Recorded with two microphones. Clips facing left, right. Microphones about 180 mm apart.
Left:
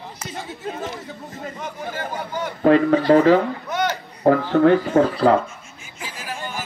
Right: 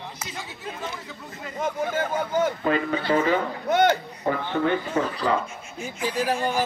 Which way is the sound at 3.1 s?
80° left.